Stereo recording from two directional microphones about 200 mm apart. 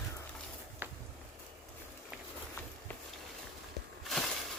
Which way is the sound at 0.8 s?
10° right (ahead or behind).